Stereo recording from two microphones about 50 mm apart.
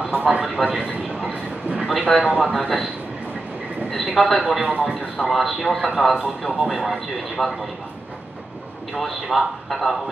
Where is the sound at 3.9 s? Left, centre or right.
Centre.